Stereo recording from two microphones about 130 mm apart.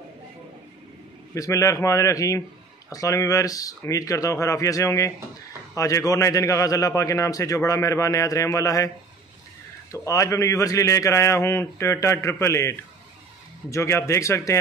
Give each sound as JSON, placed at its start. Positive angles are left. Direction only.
{"t": 1.3, "sound": "a man's voice", "side_deg": 25}